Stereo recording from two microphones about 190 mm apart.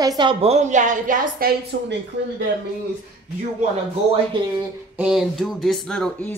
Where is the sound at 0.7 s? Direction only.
40° right (ahead or behind).